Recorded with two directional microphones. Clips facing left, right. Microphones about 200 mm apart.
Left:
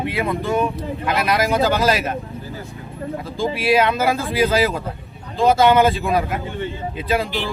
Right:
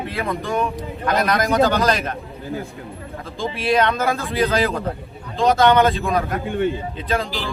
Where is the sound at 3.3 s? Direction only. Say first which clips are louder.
Left 2 dB; 5° left (ahead or behind).